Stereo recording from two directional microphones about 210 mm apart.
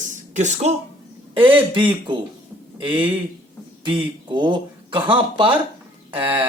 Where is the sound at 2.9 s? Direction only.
5° right (ahead or behind).